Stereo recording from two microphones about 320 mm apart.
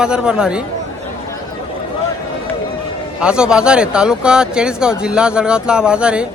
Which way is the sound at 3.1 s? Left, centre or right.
Centre.